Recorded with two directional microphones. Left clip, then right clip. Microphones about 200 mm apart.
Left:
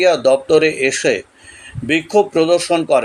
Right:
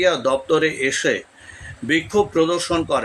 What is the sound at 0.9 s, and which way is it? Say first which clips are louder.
Speech: left 4 dB; 50° right (ahead or behind).